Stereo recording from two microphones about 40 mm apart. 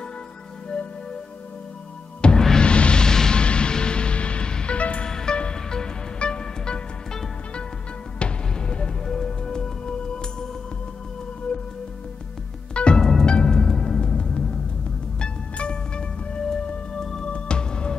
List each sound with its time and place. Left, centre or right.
2.2 s music: left
5.0 s music: centre
9.0 s music: centre
12.7 s music: left
13.0 s music: centre
13.3 s music: left